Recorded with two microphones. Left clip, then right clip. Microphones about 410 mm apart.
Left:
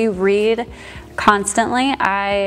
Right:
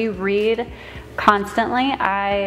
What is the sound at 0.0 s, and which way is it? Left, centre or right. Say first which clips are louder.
A woman's voice: left 4 dB; left.